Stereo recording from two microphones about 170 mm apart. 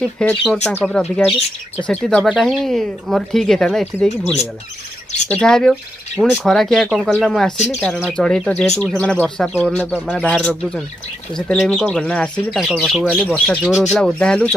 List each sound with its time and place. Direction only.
0.0 s speech: 5° left (ahead or behind)
4.1 s speech: 40° left (ahead or behind)
5.3 s speech: 5° left (ahead or behind)
7.5 s speech: 40° left (ahead or behind)
7.8 s speech: 5° left (ahead or behind)